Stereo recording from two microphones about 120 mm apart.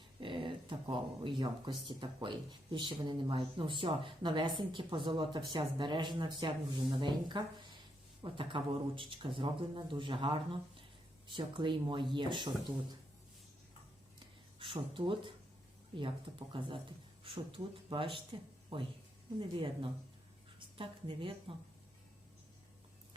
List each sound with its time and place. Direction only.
0.2 s speech: 45° right (ahead or behind)
14.6 s speech: 45° right (ahead or behind)
19.4 s speech: 45° right (ahead or behind)